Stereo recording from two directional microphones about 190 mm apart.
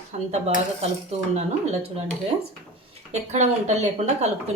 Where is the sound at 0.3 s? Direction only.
35° right (ahead or behind).